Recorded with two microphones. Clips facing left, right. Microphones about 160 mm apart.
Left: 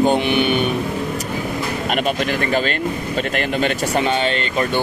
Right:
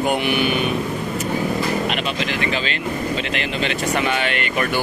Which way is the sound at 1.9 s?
45° left (ahead or behind).